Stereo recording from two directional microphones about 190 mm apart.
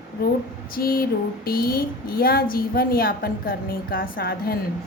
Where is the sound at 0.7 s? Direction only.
50° left (ahead or behind).